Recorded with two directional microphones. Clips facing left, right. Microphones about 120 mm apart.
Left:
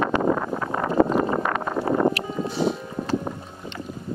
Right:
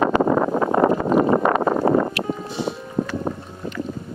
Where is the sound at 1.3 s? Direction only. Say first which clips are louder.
Right 7 dB; 30° right (ahead or behind).